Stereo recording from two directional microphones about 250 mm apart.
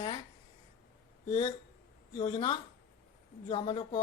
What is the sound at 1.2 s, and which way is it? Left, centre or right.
A woman's voice, left.